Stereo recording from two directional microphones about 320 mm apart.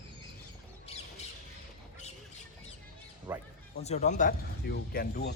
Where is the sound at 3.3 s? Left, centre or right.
Centre.